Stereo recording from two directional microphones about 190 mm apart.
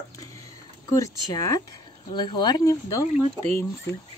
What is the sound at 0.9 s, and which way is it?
Speech, 15° left (ahead or behind).